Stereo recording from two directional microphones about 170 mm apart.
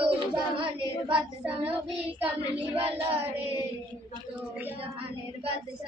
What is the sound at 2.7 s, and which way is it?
Child singing, 35° right (ahead or behind).